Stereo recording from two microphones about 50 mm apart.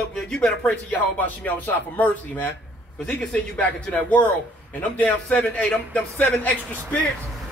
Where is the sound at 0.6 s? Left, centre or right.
Left.